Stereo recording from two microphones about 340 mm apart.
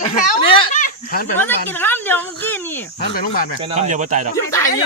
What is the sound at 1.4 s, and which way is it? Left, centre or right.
Speech, centre.